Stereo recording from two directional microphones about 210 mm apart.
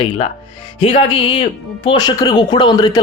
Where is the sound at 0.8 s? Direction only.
25° left (ahead or behind).